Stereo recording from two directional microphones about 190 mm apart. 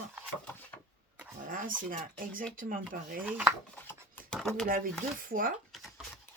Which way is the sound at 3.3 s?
5° right (ahead or behind).